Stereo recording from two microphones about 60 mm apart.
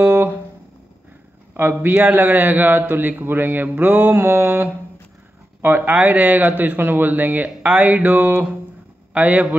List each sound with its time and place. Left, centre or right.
0.0 s guitar: right
1.5 s a man's voice: right